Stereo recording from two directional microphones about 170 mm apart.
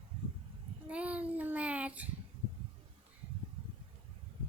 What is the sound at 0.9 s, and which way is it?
Child singing, 10° right (ahead or behind).